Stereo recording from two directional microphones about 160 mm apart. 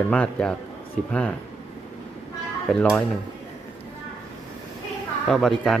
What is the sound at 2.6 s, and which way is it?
Speech, centre (ahead or behind).